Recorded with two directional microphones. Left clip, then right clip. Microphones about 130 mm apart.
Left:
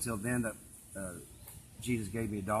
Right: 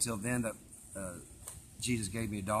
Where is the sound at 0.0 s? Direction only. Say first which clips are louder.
Even; 30° right (ahead or behind).